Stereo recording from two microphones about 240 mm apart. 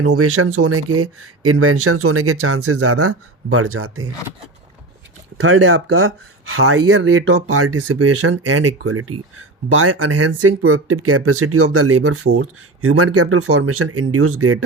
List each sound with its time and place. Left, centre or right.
0.0 s speech: right
5.4 s speech: right